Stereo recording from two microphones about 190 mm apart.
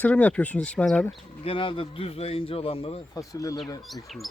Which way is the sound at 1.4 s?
30° left (ahead or behind).